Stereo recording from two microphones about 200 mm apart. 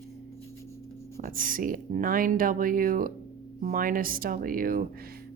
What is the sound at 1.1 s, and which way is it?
Speech, 45° right (ahead or behind).